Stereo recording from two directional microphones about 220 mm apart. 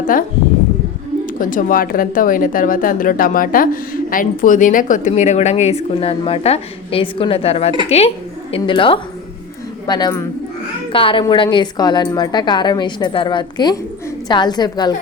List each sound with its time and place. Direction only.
1.4 s a woman's voice: 40° left (ahead or behind); by 14.9 s 20° left (ahead or behind)